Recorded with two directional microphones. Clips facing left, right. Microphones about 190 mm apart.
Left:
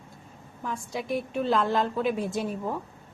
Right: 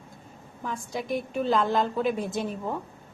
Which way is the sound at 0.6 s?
Centre (ahead or behind).